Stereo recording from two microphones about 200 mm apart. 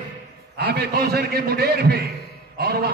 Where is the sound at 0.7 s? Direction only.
50° right (ahead or behind).